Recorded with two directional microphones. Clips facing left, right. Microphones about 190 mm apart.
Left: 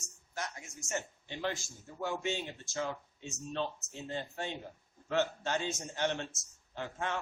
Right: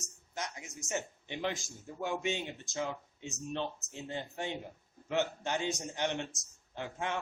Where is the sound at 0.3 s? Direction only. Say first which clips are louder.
Even; 20° right (ahead or behind).